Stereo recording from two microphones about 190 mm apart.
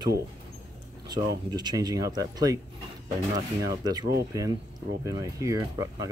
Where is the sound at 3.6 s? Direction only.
20° right (ahead or behind).